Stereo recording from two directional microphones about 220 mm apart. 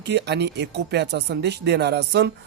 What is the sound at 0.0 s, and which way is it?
Speech, 50° right (ahead or behind).